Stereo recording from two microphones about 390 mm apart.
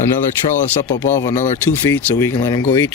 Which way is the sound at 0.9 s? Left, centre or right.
Left.